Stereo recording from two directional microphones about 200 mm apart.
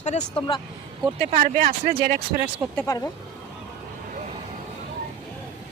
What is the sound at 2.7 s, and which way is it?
Speech, 15° left (ahead or behind).